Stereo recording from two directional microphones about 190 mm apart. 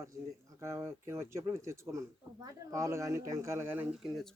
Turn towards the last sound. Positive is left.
turn(degrees=-10)  # may be behind; listen again after turning